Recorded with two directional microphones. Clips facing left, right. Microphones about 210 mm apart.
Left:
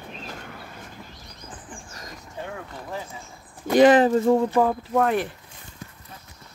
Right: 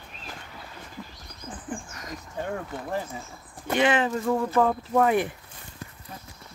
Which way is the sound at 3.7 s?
35° left (ahead or behind).